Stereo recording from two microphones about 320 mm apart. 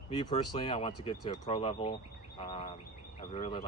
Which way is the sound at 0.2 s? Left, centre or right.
Centre.